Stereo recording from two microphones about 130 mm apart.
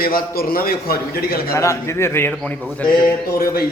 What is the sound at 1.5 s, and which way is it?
Speech, 20° left (ahead or behind).